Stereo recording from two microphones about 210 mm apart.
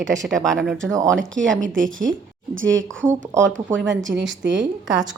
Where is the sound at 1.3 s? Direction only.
60° right (ahead or behind).